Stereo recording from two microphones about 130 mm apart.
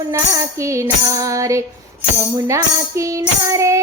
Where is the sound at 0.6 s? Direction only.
25° right (ahead or behind).